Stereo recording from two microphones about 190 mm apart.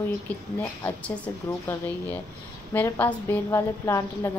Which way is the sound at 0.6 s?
10° left (ahead or behind).